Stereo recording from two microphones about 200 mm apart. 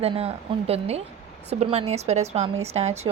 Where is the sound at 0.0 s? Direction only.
30° right (ahead or behind).